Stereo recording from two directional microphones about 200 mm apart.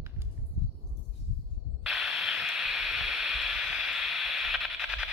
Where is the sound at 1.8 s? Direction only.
Centre (ahead or behind).